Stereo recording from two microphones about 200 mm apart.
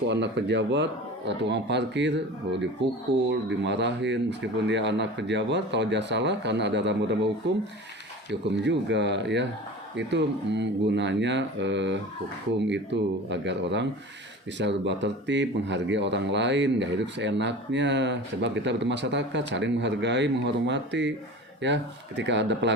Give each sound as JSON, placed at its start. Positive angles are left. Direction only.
{"t": 0.1, "sound": "speech", "side_deg": -60}